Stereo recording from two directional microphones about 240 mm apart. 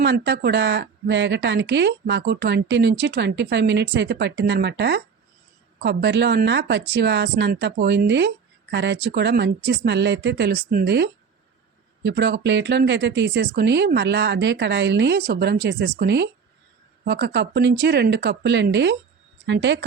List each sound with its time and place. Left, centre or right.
0.0 s speech: right